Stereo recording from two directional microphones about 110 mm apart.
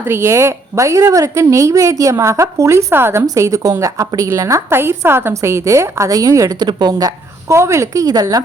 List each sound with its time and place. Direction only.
0.0 s a woman's voice: 20° right (ahead or behind)
6.6 s a woman's voice: 40° right (ahead or behind)